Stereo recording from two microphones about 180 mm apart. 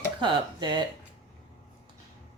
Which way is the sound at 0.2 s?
25° right (ahead or behind).